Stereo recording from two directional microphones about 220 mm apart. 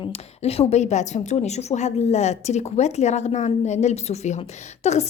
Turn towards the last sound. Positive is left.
turn(degrees=30)  # may be behind; listen again after turning